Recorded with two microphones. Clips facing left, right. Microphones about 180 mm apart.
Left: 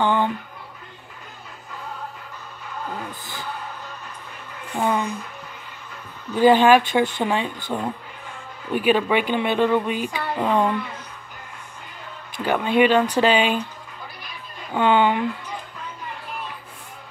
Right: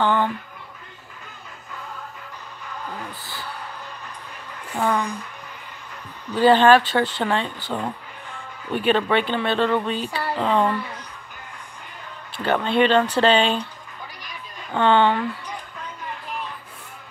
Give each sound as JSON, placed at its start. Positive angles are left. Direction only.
{"t": 0.0, "sound": "speech", "side_deg": 15}
{"t": 4.7, "sound": "speech", "side_deg": 10}
{"t": 6.3, "sound": "speech", "side_deg": 10}
{"t": 12.4, "sound": "speech", "side_deg": 10}
{"t": 14.7, "sound": "speech", "side_deg": 10}